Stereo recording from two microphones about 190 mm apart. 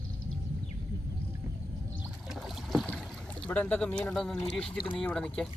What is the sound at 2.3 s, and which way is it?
Boat, centre (ahead or behind).